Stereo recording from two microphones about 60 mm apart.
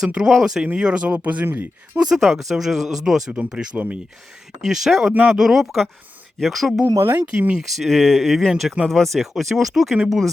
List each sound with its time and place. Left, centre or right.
0.0 s speech: centre
1.1 s speech: right
1.5 s speech: right
2.0 s speech: centre
3.3 s speech: right
4.6 s speech: centre
7.0 s speech: right
7.3 s speech: centre
7.6 s speech: centre